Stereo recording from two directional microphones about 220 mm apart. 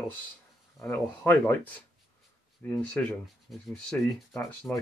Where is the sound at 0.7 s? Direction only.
10° left (ahead or behind).